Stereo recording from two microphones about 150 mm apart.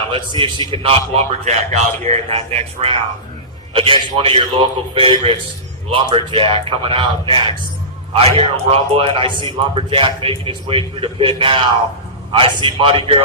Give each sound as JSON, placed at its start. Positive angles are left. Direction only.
{"t": 0.1, "sound": "a man's voice", "side_deg": -35}
{"t": 12.6, "sound": "a man's voice", "side_deg": -35}